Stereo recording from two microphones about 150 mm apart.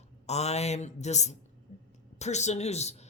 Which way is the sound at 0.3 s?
45° left (ahead or behind).